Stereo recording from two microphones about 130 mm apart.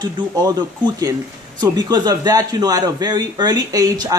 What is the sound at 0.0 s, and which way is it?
A man's voice, 30° right (ahead or behind).